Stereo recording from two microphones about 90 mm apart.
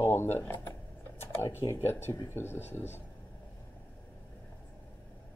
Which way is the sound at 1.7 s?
30° left (ahead or behind).